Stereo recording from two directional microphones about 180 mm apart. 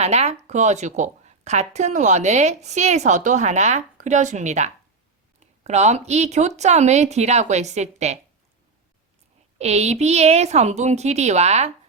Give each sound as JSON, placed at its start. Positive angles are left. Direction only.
{"t": 0.0, "sound": "a woman's voice", "side_deg": -35}
{"t": 9.6, "sound": "a woman's voice", "side_deg": -35}